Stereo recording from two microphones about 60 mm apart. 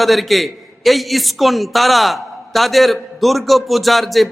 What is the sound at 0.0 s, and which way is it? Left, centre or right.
A man's voice, centre.